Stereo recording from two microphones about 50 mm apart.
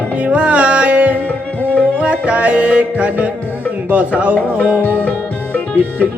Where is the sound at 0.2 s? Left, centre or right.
Right.